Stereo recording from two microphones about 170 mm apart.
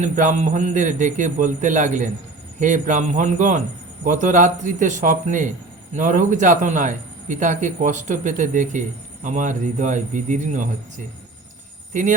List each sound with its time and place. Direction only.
0.0 s a man's voice: 45° right (ahead or behind)